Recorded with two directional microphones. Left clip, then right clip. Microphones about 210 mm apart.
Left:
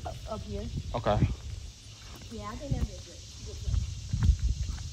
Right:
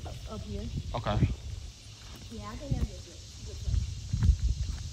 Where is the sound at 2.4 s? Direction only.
Centre (ahead or behind).